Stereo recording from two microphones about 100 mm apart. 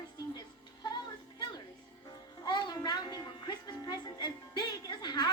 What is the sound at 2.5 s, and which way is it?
Music, 45° left (ahead or behind).